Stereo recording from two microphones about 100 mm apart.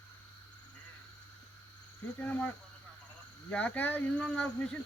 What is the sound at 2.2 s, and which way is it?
Speech, 15° left (ahead or behind).